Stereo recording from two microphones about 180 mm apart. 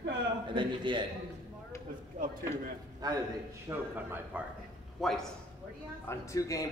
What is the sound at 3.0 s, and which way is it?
Speech, 20° right (ahead or behind).